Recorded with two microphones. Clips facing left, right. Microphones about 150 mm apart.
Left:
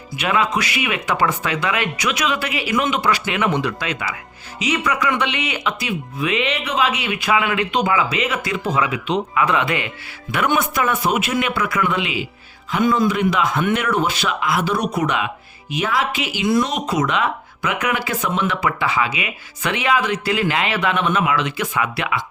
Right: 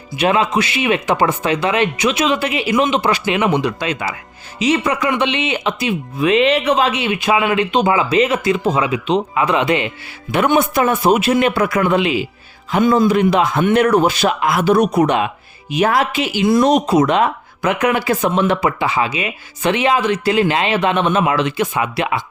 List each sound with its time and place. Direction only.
0.2 s speech: 25° right (ahead or behind)
6.1 s speech: 35° right (ahead or behind)
6.9 s speech: 25° right (ahead or behind); by 16.2 s 45° right (ahead or behind)
16.2 s speech: 35° right (ahead or behind)